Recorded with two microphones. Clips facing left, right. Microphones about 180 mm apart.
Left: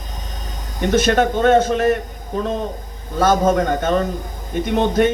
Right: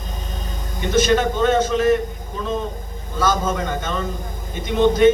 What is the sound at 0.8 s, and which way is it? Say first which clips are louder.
Speech: left 2 dB; 60° left (ahead or behind).